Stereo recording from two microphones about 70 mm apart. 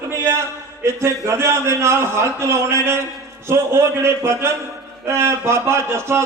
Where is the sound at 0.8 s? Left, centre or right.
Right.